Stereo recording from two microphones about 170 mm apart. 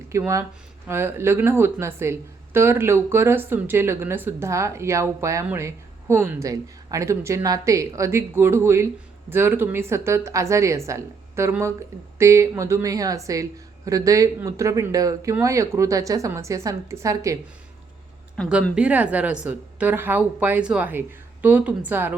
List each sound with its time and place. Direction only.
0.1 s a woman's voice: 20° right (ahead or behind)
18.7 s speech: 10° right (ahead or behind)